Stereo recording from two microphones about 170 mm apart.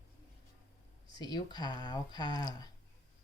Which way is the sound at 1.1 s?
25° left (ahead or behind).